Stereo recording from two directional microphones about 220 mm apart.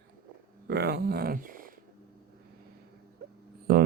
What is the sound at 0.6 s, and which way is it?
Speech, 45° right (ahead or behind).